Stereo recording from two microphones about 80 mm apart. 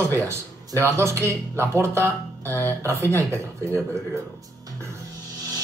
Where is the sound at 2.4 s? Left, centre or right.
Left.